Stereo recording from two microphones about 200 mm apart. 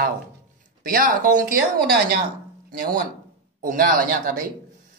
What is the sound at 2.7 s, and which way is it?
A woman's voice, 45° right (ahead or behind).